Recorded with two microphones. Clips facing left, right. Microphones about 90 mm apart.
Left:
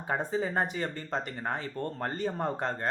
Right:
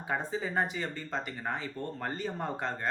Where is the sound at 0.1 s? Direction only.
40° left (ahead or behind).